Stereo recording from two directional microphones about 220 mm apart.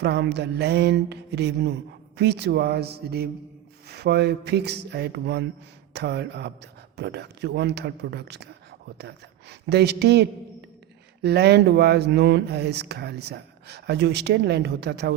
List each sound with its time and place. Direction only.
0.0 s speech: 50° right (ahead or behind)